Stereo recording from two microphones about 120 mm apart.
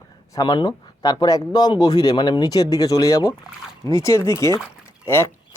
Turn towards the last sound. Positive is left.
turn(degrees=20)  # may be behind; listen again after turning